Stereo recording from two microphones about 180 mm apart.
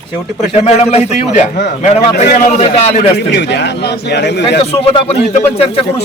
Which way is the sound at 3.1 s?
70° left (ahead or behind).